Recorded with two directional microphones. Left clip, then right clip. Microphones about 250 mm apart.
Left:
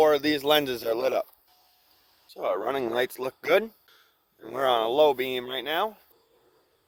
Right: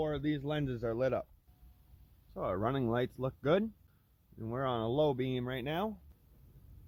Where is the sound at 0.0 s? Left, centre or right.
Left; by 1.3 s centre.